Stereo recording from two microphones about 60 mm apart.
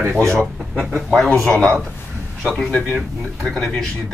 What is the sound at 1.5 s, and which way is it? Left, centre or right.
A man's voice, centre.